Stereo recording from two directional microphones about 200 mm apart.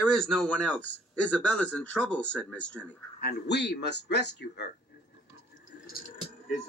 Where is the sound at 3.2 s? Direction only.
55° left (ahead or behind).